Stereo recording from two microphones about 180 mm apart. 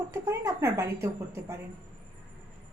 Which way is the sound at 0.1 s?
15° right (ahead or behind).